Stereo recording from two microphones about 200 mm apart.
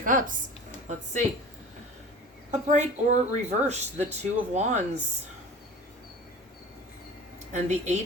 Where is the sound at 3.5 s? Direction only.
35° right (ahead or behind).